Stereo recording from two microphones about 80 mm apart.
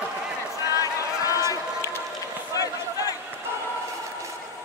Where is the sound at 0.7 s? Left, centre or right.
Left.